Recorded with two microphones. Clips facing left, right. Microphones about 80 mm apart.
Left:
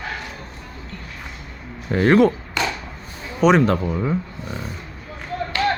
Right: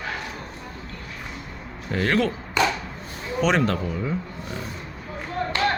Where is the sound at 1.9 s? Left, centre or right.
Left.